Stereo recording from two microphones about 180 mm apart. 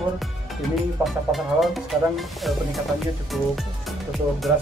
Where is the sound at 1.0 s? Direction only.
Centre (ahead or behind).